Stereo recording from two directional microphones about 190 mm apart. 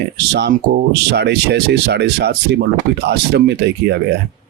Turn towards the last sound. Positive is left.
turn(degrees=-60)  # may be behind; listen again after turning